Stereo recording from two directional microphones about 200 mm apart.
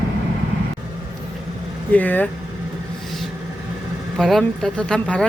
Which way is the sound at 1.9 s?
10° left (ahead or behind).